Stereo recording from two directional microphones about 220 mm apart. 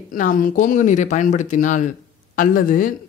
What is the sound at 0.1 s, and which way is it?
Speech, 40° left (ahead or behind).